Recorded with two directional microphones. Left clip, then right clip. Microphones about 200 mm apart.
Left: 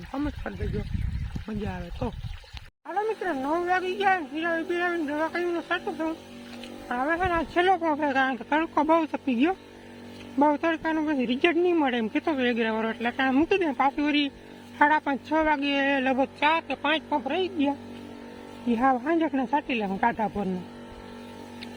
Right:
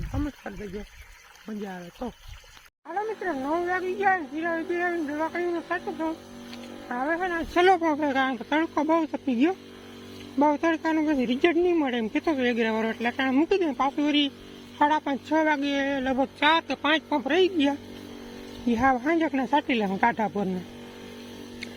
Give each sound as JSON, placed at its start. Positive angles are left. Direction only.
{"t": 0.4, "sound": "speech", "side_deg": 30}
{"t": 1.5, "sound": "speech", "side_deg": 10}
{"t": 7.2, "sound": "speech", "side_deg": 35}
{"t": 7.5, "sound": "speech", "side_deg": -20}
{"t": 7.8, "sound": "speech", "side_deg": -5}
{"t": 16.4, "sound": "speech", "side_deg": -15}
{"t": 18.7, "sound": "speech", "side_deg": -10}